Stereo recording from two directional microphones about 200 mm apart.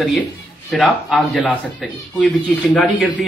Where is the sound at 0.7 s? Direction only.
Centre (ahead or behind).